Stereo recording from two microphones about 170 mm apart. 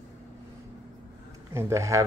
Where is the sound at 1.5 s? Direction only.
15° right (ahead or behind).